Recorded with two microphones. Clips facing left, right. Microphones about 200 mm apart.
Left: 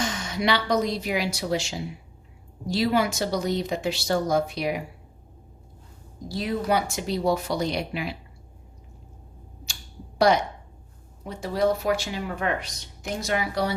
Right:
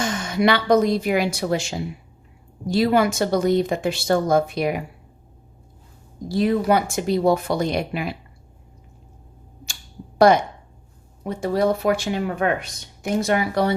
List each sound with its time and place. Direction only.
0.0 s speech: 50° right (ahead or behind)
6.3 s speech: 50° right (ahead or behind)
10.2 s speech: 50° right (ahead or behind)